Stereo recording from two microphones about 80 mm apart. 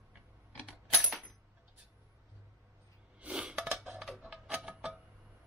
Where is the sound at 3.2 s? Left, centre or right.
Centre.